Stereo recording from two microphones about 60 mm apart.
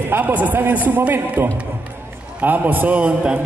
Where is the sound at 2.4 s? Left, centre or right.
Right.